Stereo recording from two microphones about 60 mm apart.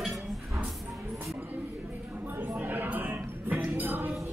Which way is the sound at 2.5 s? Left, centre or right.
Right.